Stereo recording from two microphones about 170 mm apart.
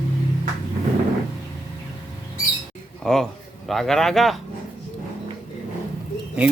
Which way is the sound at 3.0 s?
Centre (ahead or behind).